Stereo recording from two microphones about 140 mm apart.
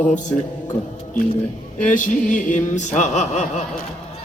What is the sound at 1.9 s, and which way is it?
Music, 65° left (ahead or behind).